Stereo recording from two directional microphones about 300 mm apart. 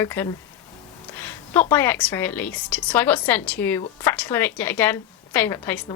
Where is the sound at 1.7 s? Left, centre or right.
Centre.